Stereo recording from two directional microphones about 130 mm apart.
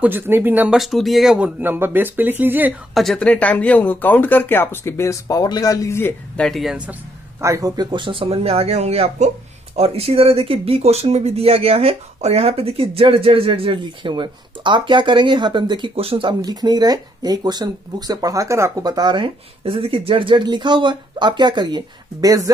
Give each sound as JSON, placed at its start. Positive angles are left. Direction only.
{"t": 0.0, "sound": "speech", "side_deg": -15}
{"t": 0.7, "sound": "speech", "side_deg": 0}
{"t": 2.9, "sound": "speech", "side_deg": 0}
{"t": 6.3, "sound": "speech", "side_deg": 5}
{"t": 6.9, "sound": "speech", "side_deg": -20}
{"t": 16.3, "sound": "speech", "side_deg": -30}